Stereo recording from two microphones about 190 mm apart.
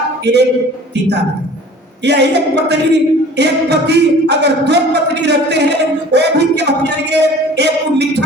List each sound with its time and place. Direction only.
0.3 s speech: 65° right (ahead or behind)
2.0 s speech: 60° right (ahead or behind)